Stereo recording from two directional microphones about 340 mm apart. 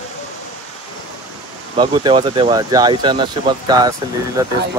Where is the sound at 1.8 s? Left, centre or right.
Centre.